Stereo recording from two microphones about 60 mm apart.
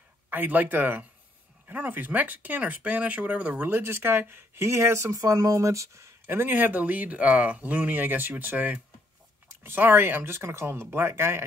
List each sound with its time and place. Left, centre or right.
0.3 s speech: right
3.8 s speech: right
5.1 s speech: right
6.2 s speech: right